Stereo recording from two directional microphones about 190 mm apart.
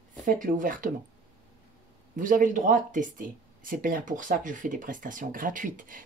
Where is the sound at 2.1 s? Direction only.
45° right (ahead or behind).